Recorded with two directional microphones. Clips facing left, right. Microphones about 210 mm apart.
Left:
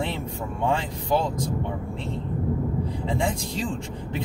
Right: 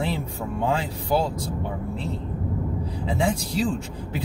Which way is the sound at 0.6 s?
10° right (ahead or behind).